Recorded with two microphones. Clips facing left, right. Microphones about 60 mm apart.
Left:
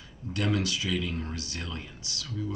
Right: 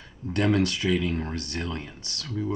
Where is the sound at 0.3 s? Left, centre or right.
Right.